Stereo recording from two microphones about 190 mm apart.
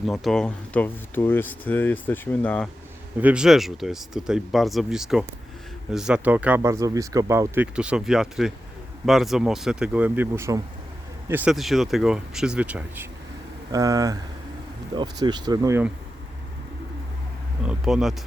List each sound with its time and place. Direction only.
0.0 s speech: centre (ahead or behind)
3.2 s speech: 5° right (ahead or behind)
13.7 s speech: 20° right (ahead or behind)
17.7 s speech: centre (ahead or behind)